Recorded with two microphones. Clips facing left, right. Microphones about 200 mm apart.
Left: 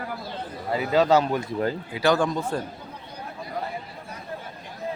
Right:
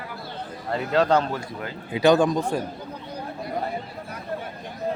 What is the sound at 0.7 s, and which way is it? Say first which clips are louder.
Speech: left 1 dB; 5° left (ahead or behind).